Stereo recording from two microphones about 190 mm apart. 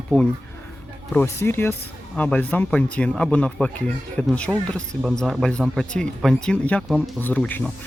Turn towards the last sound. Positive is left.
turn(degrees=10)  # may be behind; listen again after turning